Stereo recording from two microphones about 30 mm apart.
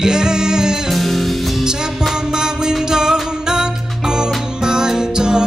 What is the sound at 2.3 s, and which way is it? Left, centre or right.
Music, right.